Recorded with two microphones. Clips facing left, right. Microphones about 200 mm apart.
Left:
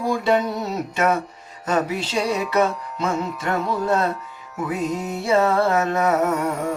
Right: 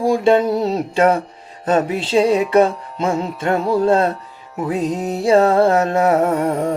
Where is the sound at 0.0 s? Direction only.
30° right (ahead or behind).